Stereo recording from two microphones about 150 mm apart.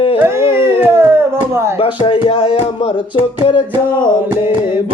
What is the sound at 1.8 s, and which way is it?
Speech, 35° left (ahead or behind).